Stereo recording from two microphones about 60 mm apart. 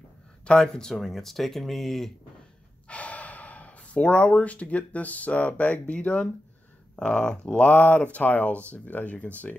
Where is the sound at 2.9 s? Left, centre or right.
Left.